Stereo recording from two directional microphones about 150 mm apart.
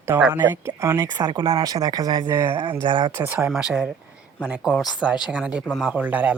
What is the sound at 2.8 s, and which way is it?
Speech, 30° right (ahead or behind).